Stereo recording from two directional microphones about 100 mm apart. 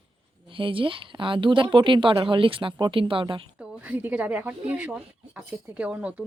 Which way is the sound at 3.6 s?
15° right (ahead or behind).